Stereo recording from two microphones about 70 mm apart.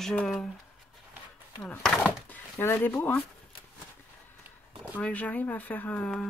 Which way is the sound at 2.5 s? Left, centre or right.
Left.